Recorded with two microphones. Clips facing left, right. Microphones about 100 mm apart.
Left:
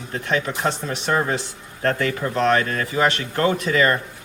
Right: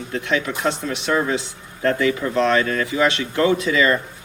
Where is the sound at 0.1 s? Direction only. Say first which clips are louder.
Right 1 dB; 40° left (ahead or behind).